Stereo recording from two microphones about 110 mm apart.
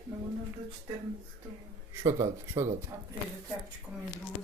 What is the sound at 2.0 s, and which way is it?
Speech, 30° right (ahead or behind).